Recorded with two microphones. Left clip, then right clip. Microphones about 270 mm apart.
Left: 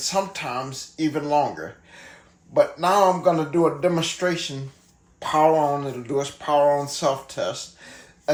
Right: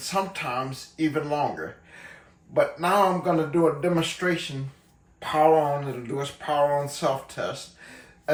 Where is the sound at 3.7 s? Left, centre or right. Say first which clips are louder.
Left 3 dB; centre.